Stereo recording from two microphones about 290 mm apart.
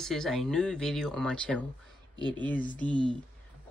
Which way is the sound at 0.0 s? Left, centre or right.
Centre.